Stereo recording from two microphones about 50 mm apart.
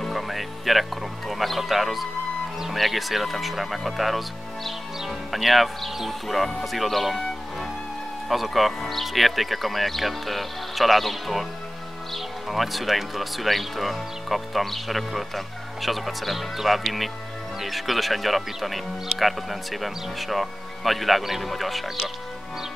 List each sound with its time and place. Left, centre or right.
0.0 s speech: centre